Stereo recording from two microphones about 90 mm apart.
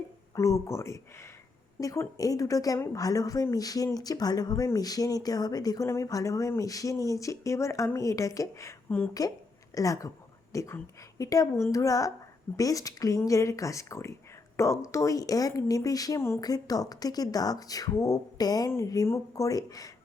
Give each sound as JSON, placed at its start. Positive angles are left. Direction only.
{"t": 0.3, "sound": "speech", "side_deg": 35}
{"t": 19.0, "sound": "speech", "side_deg": 35}